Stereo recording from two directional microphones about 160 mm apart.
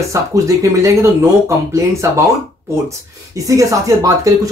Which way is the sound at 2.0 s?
20° right (ahead or behind).